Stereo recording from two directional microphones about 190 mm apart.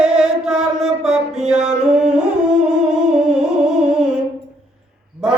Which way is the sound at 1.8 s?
5° right (ahead or behind).